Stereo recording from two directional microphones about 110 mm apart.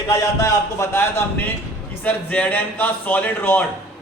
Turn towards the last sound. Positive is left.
turn(degrees=15)  # may be behind; listen again after turning